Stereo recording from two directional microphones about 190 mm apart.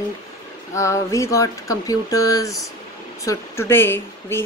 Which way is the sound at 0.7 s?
15° left (ahead or behind).